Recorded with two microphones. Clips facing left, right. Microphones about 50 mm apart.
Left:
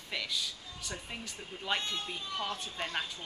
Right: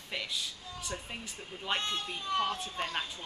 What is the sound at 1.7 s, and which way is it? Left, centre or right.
Speech, right.